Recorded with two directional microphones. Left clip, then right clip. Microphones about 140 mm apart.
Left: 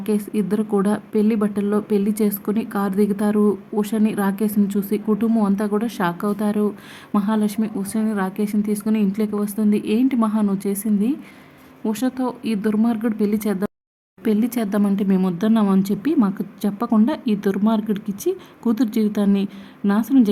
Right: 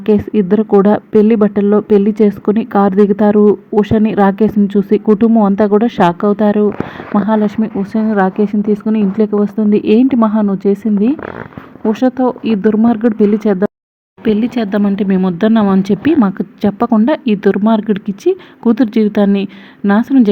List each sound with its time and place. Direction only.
0.0 s speech: 35° right (ahead or behind)